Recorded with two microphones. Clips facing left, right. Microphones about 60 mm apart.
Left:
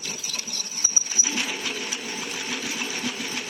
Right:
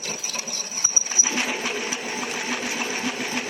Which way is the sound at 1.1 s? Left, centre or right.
Right.